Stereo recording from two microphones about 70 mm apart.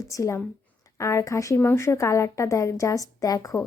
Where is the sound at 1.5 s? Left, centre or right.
Left.